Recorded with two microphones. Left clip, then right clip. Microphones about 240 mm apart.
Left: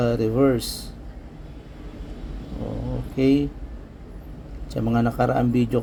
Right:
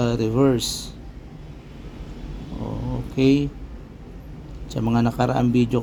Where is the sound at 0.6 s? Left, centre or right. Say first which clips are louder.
Right 5 dB; centre.